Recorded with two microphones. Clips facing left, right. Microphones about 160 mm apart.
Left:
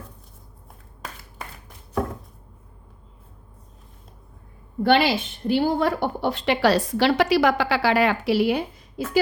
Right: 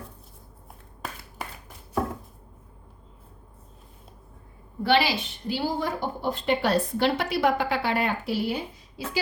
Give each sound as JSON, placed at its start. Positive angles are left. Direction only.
{"t": 4.8, "sound": "a woman's voice", "side_deg": 50}